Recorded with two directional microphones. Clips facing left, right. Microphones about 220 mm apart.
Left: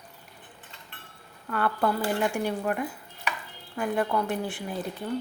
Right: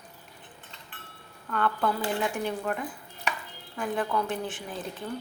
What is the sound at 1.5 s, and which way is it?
A woman's voice, 5° left (ahead or behind).